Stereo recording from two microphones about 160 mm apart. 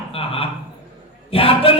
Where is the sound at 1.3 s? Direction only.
35° left (ahead or behind).